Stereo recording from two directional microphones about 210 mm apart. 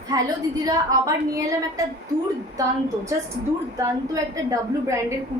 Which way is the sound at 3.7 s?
15° right (ahead or behind).